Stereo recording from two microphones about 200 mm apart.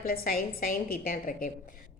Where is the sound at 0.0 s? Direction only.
45° left (ahead or behind).